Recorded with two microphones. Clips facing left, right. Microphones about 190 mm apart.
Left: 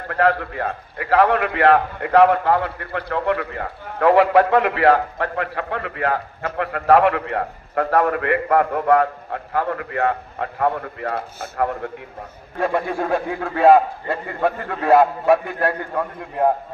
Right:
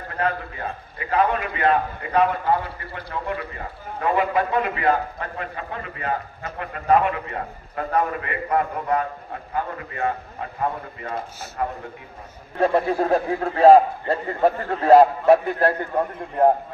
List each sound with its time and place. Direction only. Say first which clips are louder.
0.1 s a man's voice: left 7 dB; 70° left (ahead or behind)
12.5 s a man's voice: right 2 dB; 35° right (ahead or behind)